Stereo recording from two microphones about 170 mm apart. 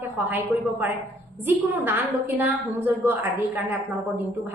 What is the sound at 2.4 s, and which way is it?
Speech, 10° right (ahead or behind).